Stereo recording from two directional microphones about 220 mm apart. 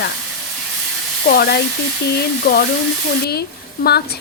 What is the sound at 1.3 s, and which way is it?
Speech, 45° left (ahead or behind).